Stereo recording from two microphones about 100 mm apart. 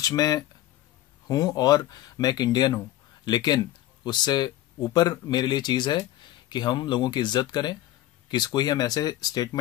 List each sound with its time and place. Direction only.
0.0 s speech: 40° left (ahead or behind)